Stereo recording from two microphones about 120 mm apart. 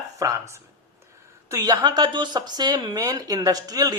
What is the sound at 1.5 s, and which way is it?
Speech, 30° right (ahead or behind).